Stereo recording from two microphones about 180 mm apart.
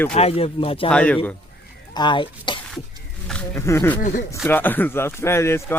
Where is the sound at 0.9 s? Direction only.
5° left (ahead or behind).